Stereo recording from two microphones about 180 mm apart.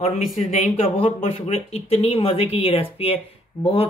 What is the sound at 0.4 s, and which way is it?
Speech, 40° left (ahead or behind).